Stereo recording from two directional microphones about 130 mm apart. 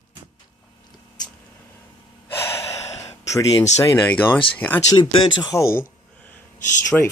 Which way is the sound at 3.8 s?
20° left (ahead or behind).